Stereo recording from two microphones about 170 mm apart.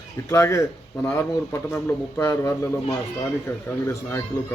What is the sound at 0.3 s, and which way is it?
Speech, 15° left (ahead or behind).